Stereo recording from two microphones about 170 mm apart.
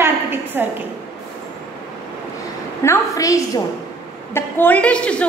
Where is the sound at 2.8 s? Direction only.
20° left (ahead or behind).